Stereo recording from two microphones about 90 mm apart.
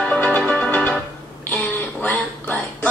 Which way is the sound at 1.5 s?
20° left (ahead or behind).